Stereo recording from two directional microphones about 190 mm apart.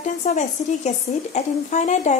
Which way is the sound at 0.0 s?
40° left (ahead or behind).